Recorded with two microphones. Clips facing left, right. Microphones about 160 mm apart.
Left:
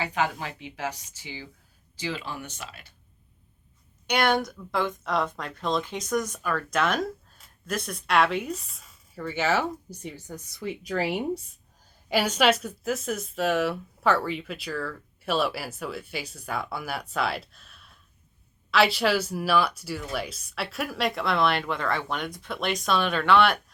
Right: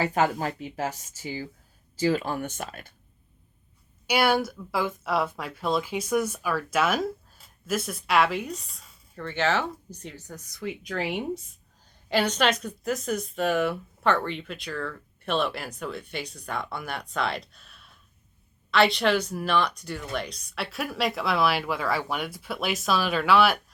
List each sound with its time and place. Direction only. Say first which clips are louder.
0.0 s speech: right 4 dB; 45° right (ahead or behind)
4.0 s speech: right 1 dB; 5° right (ahead or behind)